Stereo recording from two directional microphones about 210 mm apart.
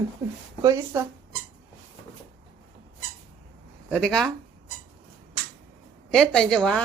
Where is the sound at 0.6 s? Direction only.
15° right (ahead or behind).